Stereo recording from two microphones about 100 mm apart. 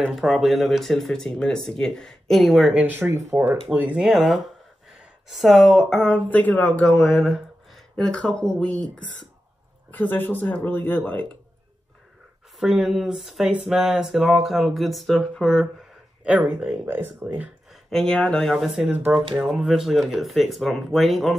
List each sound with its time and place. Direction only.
0.1 s speech: 5° right (ahead or behind)
2.8 s speech: 25° right (ahead or behind)
3.7 s speech: 15° right (ahead or behind); by 7.0 s 10° left (ahead or behind)
7.0 s speech: centre (ahead or behind)
7.9 s speech: 10° left (ahead or behind)
12.5 s speech: 5° right (ahead or behind)
16.3 s speech: 15° right (ahead or behind)
17.8 s speech: 5° left (ahead or behind)
18.9 s speech: 15° right (ahead or behind)
19.4 s speech: 5° right (ahead or behind)